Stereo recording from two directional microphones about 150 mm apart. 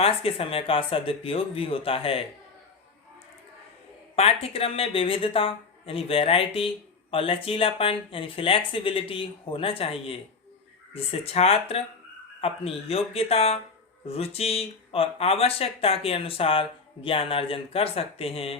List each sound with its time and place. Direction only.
0.0 s speech: 40° left (ahead or behind)
4.1 s speech: 40° left (ahead or behind)